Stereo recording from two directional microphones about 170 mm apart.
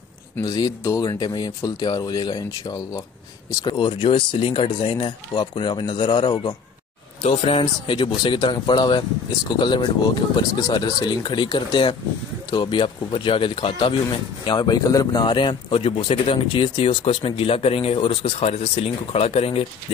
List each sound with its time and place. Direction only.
0.4 s a man's voice: 25° left (ahead or behind)